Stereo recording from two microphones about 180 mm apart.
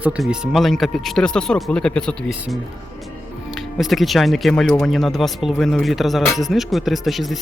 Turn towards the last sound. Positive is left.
turn(degrees=0)  # may be behind; listen again after turning